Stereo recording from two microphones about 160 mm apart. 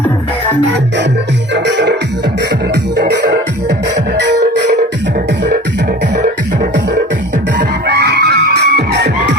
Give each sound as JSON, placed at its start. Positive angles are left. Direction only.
{"t": 1.5, "sound": "music", "side_deg": -90}
{"t": 7.9, "sound": "music", "side_deg": -90}